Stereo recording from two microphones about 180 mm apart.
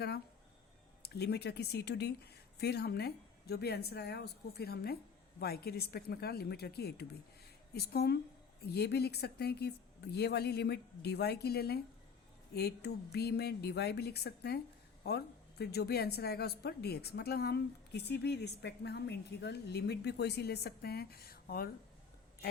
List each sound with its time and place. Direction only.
1.0 s a woman's voice: 65° left (ahead or behind)